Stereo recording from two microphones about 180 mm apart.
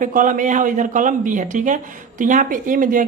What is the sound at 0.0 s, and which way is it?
A man's voice, 45° right (ahead or behind).